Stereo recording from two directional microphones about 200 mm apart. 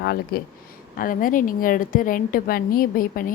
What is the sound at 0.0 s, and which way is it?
A woman's voice, 55° left (ahead or behind).